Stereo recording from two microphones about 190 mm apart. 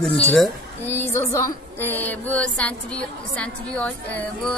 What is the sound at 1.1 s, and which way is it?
Music, 15° left (ahead or behind).